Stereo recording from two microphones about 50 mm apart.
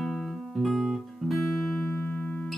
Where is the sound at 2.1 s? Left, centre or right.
Left.